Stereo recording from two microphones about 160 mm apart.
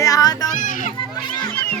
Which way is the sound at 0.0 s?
20° left (ahead or behind).